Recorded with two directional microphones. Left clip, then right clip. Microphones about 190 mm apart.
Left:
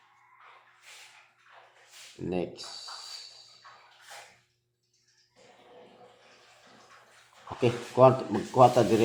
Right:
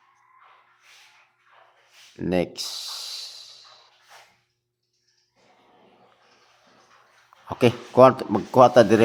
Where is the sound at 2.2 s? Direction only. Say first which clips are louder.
Right 9 dB; 35° right (ahead or behind).